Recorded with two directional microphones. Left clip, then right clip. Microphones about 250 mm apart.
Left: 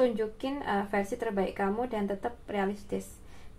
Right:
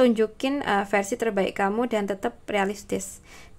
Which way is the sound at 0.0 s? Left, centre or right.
Right.